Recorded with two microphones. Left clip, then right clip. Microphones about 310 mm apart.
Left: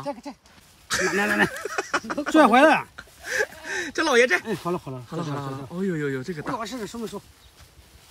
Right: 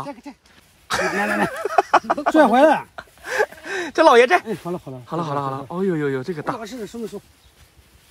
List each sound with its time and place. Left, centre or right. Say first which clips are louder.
0.1 s speech: left 2 dB; left
0.8 s speech: right 3 dB; centre
1.1 s a sound: left 2 dB; centre
1.7 s speech: right 11 dB; centre
2.2 s a sound: even; centre
4.0 s speech: right 7 dB; centre